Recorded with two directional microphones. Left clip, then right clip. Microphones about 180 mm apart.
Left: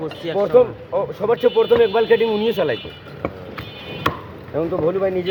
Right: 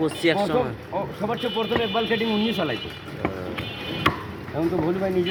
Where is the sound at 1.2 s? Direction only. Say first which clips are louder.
Left 12 dB; 55° left (ahead or behind).